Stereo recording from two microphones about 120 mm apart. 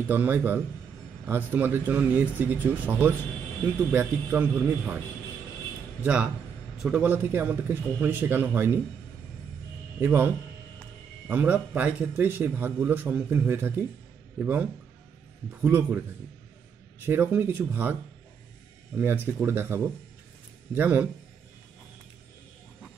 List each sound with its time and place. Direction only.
0.1 s a man's voice: 15° right (ahead or behind)
6.0 s a man's voice: 10° right (ahead or behind)
9.9 s a man's voice: 15° right (ahead or behind)
17.0 s a man's voice: 15° right (ahead or behind)
18.9 s a man's voice: 15° right (ahead or behind)